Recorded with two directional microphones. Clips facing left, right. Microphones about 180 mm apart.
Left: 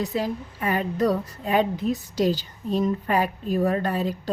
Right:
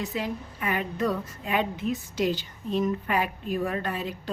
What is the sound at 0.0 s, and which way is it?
A woman's voice, 35° left (ahead or behind).